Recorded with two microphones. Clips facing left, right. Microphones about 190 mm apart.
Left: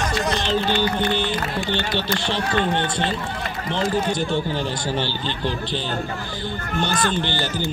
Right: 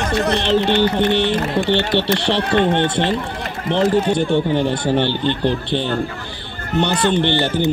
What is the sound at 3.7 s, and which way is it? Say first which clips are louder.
A man's voice: right 7 dB; 65° right (ahead or behind).